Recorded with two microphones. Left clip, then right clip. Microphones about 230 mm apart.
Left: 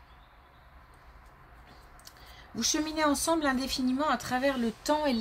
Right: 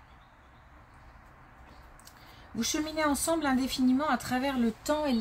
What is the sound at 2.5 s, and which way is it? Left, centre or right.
Speech, left.